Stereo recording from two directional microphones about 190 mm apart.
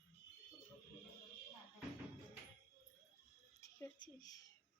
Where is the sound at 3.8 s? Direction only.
20° left (ahead or behind).